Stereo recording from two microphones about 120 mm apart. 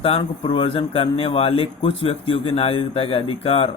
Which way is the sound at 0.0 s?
50° left (ahead or behind).